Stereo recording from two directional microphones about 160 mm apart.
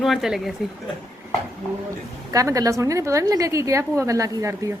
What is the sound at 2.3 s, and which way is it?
A woman's voice, 20° right (ahead or behind).